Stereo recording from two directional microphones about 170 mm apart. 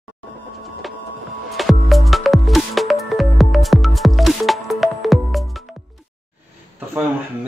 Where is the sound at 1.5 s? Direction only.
Centre (ahead or behind).